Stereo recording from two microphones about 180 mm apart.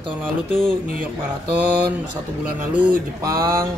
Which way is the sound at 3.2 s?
20° right (ahead or behind).